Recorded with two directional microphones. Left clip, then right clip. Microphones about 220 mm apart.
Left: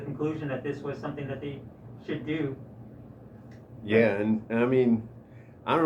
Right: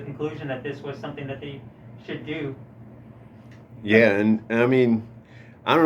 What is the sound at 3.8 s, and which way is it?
A man's voice, 40° right (ahead or behind).